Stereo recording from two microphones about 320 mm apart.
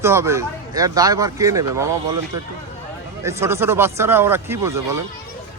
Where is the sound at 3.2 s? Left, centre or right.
Centre.